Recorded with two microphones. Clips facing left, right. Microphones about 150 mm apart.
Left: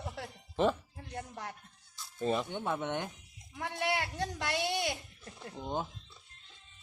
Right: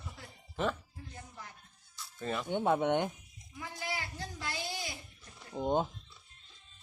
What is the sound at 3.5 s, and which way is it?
A man's voice, 70° left (ahead or behind).